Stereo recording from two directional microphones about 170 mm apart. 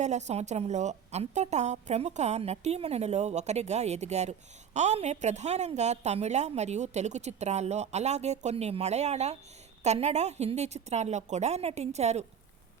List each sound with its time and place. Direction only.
0.0 s a woman's voice: 40° right (ahead or behind)